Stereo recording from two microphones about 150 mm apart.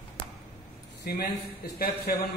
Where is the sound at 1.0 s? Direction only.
90° left.